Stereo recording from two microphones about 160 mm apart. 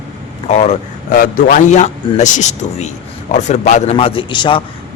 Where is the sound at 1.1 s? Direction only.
65° left (ahead or behind); by 3.9 s 45° left (ahead or behind).